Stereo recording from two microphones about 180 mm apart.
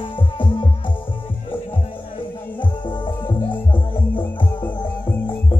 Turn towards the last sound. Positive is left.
turn(degrees=25)  # may be behind; listen again after turning